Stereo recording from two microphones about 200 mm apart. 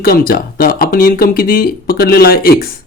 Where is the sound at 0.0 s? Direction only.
50° left (ahead or behind).